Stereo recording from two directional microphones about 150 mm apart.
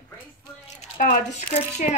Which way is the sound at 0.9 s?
65° left (ahead or behind).